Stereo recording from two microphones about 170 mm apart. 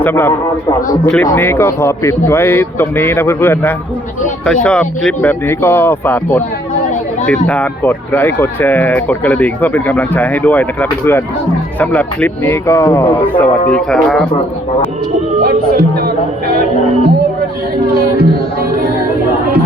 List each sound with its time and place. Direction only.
0.0 s speech: 15° left (ahead or behind)
15.4 s speech: 60° right (ahead or behind)